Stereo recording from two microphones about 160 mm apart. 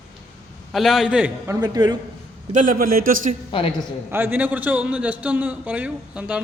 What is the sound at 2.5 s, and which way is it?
Speech, 55° right (ahead or behind).